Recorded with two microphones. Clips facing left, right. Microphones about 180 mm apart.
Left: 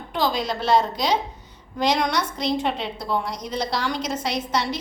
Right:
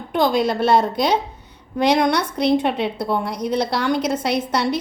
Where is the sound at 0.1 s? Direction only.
55° right (ahead or behind).